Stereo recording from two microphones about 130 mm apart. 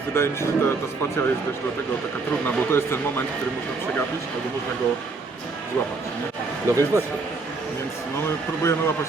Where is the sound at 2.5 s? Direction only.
15° left (ahead or behind).